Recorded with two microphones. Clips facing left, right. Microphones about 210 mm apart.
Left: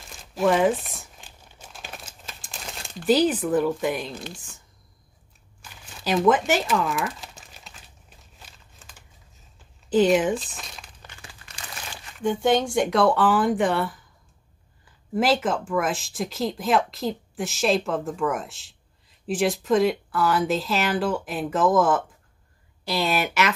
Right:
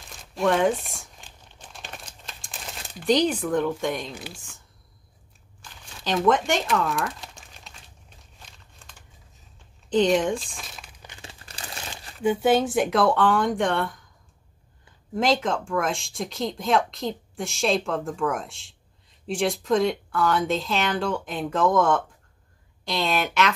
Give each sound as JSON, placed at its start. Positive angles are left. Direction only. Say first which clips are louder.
{"t": 0.0, "sound": "crumpling", "louder": "left 2 dB", "side_deg": 0}
{"t": 4.1, "sound": "speech", "louder": "left 2 dB", "side_deg": -10}
{"t": 5.6, "sound": "crumpling", "louder": "left 1 dB", "side_deg": 5}
{"t": 9.8, "sound": "speech", "louder": "left 2 dB", "side_deg": 5}
{"t": 11.0, "sound": "crumpling", "louder": "right 2 dB", "side_deg": -20}
{"t": 12.2, "sound": "speech", "louder": "right 1 dB", "side_deg": -5}
{"t": 15.1, "sound": "speech", "louder": "left 1 dB", "side_deg": 5}